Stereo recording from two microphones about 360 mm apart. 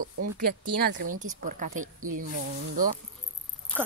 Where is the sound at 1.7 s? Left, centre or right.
Right.